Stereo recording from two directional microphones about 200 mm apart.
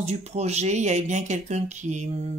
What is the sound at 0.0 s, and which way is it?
Speech, 35° right (ahead or behind).